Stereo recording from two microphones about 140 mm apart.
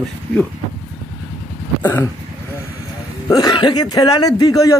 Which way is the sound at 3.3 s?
30° left (ahead or behind).